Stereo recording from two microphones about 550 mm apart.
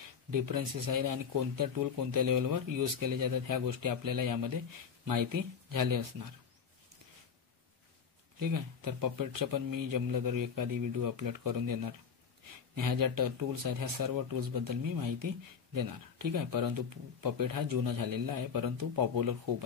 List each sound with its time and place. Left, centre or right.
0.3 s speech: right
8.4 s speech: right